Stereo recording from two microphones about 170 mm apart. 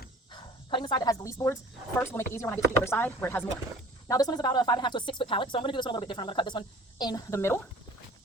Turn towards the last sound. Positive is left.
turn(degrees=15)  # may be behind; listen again after turning